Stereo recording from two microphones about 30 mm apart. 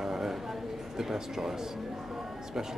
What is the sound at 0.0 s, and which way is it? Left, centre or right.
Music, centre.